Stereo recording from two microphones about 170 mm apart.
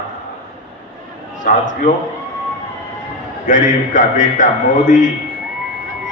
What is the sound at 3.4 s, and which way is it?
A man's voice, 50° left (ahead or behind).